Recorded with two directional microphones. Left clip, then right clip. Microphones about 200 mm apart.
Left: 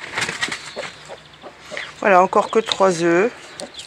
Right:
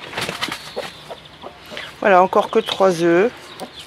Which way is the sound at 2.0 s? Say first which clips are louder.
Right 1 dB; 10° left (ahead or behind).